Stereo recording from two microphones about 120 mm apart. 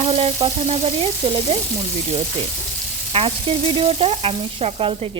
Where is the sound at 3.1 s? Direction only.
50° right (ahead or behind).